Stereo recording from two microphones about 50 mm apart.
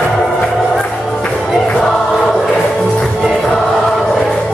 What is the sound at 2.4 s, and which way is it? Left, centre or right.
Music, centre.